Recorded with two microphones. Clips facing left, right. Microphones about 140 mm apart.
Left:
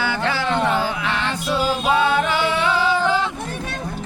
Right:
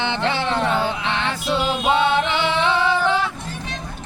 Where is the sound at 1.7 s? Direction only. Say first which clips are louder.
Even; 25° right (ahead or behind).